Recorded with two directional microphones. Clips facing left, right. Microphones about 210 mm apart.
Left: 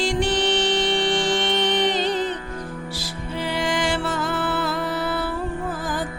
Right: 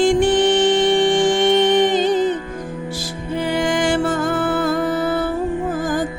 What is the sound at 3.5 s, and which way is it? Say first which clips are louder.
Music: right 5 dB; 50° right (ahead or behind).